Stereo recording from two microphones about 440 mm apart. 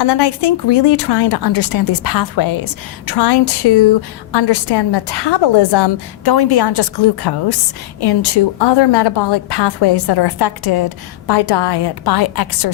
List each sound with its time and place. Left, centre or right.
0.0 s a woman's voice: left